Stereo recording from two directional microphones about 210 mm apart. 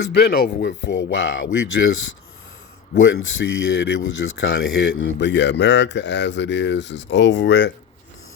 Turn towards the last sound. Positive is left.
turn(degrees=55)  # may be behind; listen again after turning